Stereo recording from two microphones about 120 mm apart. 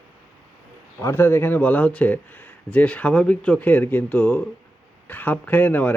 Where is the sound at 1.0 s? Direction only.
20° left (ahead or behind).